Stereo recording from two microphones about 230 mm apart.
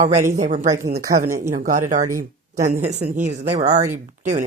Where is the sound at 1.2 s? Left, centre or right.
Centre.